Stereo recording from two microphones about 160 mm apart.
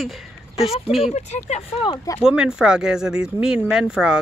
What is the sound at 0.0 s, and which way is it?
Speech, centre (ahead or behind).